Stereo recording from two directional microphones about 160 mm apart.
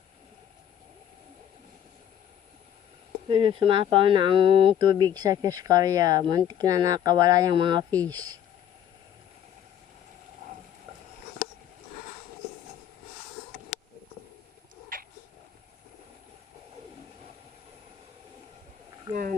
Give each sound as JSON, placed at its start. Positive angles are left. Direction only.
{"t": 3.2, "sound": "speech", "side_deg": -35}